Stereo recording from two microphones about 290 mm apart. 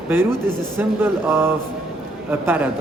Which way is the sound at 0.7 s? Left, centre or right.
Centre.